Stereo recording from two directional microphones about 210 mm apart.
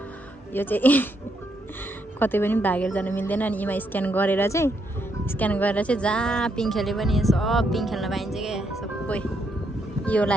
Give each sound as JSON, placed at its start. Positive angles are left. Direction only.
{"t": 0.5, "sound": "a woman's voice", "side_deg": 10}
{"t": 2.1, "sound": "a woman's voice", "side_deg": 10}